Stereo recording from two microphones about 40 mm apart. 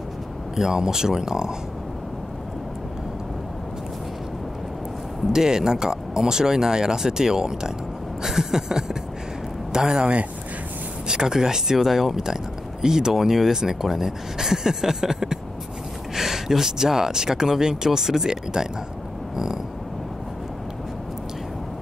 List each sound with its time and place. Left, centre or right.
0.6 s speech: centre
5.3 s speech: centre
11.1 s speech: centre
19.3 s a sound: centre